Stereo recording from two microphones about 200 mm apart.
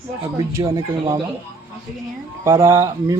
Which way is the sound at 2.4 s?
15° right (ahead or behind).